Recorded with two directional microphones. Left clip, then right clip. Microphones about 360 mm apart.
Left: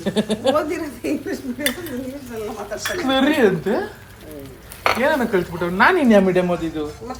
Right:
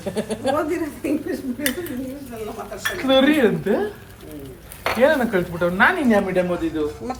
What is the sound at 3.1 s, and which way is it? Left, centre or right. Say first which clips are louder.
Speech: right 1 dB; centre.